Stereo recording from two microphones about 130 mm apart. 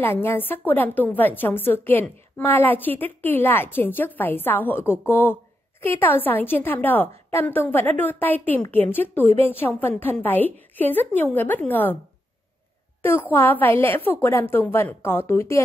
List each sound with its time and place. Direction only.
0.0 s a woman's voice: 15° left (ahead or behind)
9.2 s a woman's voice: 50° right (ahead or behind)
9.5 s a woman's voice: 15° left (ahead or behind)
13.0 s a woman's voice: 15° left (ahead or behind)